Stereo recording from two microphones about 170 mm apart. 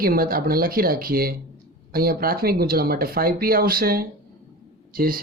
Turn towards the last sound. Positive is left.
turn(degrees=-60)  # may be behind; listen again after turning